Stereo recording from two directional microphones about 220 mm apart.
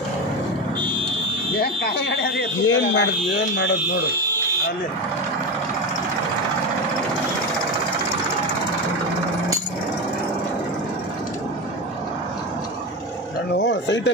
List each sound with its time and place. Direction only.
1.6 s a sound: 50° left (ahead or behind)
2.6 s speech: 60° left (ahead or behind)
13.6 s speech: 55° left (ahead or behind)